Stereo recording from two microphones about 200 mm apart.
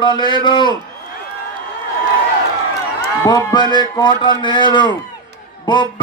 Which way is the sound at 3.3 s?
20° left (ahead or behind).